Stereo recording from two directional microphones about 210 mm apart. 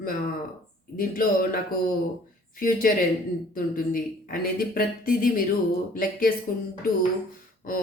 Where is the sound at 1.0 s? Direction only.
40° left (ahead or behind).